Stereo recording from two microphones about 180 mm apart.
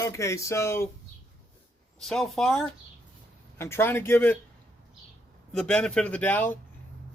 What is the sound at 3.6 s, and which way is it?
Speech, 15° left (ahead or behind).